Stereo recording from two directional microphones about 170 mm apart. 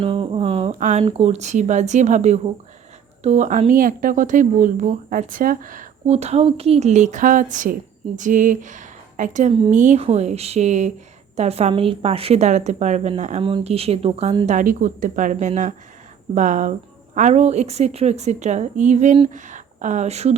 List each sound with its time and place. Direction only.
0.0 s a sound: 30° right (ahead or behind)
1.0 s a woman's voice: 40° right (ahead or behind)
14.4 s a woman's voice: 50° right (ahead or behind)